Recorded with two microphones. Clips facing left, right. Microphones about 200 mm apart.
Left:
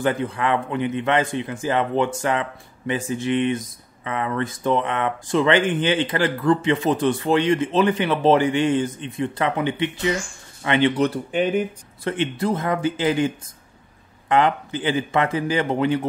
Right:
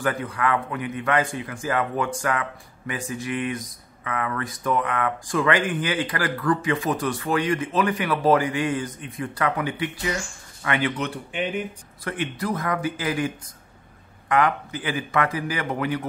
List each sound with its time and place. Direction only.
0.0 s speech: 25° left (ahead or behind)
11.1 s speech: 40° left (ahead or behind)
12.0 s speech: 25° left (ahead or behind)
14.3 s speech: 25° left (ahead or behind)